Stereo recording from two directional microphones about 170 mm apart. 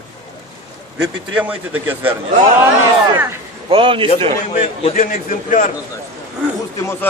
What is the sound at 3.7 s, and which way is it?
Speech, 30° right (ahead or behind).